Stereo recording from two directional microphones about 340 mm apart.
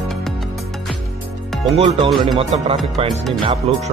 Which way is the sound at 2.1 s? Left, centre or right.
Centre.